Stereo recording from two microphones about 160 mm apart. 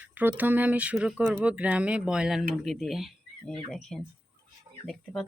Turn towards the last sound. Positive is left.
turn(degrees=0)  # may be behind; listen again after turning